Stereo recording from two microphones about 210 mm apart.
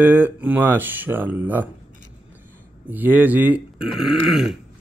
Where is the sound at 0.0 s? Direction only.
10° right (ahead or behind).